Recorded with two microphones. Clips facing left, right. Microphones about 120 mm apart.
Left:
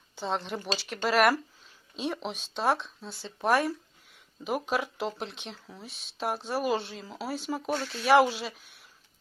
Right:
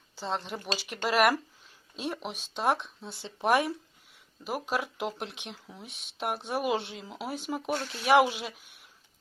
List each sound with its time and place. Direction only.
0.2 s speech: centre (ahead or behind); by 3.7 s 15° right (ahead or behind)
4.4 s speech: 5° right (ahead or behind)
6.7 s speech: centre (ahead or behind)
7.0 s speech: 15° right (ahead or behind)